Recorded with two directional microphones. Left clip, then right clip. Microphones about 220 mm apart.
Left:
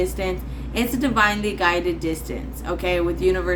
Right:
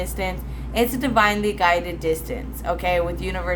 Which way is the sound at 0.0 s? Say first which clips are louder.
Left 3 dB; 25° right (ahead or behind).